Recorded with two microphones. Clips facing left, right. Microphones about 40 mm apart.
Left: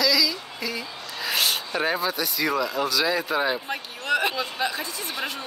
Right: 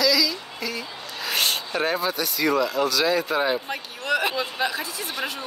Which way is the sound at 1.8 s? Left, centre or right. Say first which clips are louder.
Right 1 dB; centre.